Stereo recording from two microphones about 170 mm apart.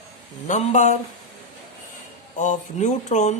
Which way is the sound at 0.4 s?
45° left (ahead or behind).